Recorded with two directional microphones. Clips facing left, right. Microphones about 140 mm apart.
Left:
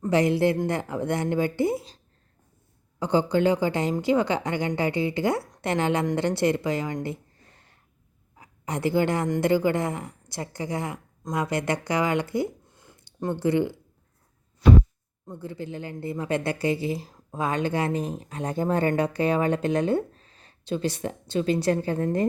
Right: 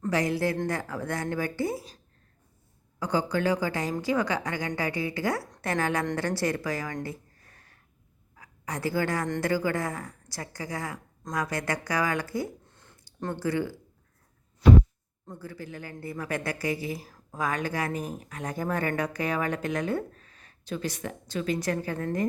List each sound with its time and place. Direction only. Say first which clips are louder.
0.1 s a woman's voice: left 6 dB; 25° left (ahead or behind)
3.0 s a woman's voice: left 5 dB; 25° left (ahead or behind)
12.6 s a sound: left 3 dB; 10° left (ahead or behind)
13.1 s a woman's voice: left 5 dB; 15° left (ahead or behind)
15.3 s a woman's voice: left 5 dB; 25° left (ahead or behind)